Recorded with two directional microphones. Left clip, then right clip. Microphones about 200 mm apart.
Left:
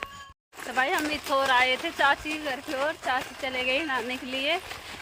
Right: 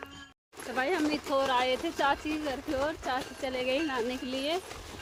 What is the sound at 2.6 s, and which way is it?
Speech, 15° left (ahead or behind).